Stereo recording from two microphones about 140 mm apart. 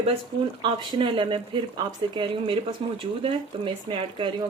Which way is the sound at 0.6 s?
35° right (ahead or behind).